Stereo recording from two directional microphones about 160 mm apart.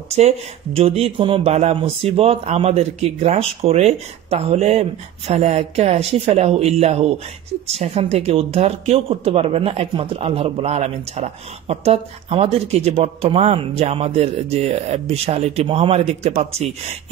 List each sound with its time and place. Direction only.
0.7 s speech: 40° right (ahead or behind)